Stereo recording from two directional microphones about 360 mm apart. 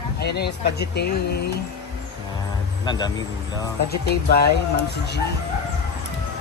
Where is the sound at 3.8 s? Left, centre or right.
Left.